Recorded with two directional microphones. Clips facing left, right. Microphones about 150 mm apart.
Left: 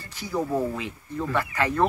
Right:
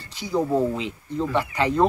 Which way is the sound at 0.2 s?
15° right (ahead or behind).